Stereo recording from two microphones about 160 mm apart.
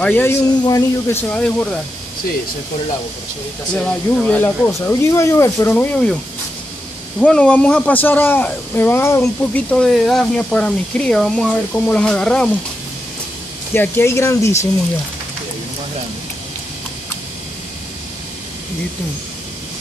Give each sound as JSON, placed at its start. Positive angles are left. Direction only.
{"t": 0.0, "sound": "speech", "side_deg": 15}
{"t": 3.7, "sound": "speech", "side_deg": 10}
{"t": 7.2, "sound": "speech", "side_deg": 5}
{"t": 13.7, "sound": "speech", "side_deg": 15}